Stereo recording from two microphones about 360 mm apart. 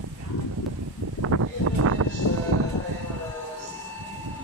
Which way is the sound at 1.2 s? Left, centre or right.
Right.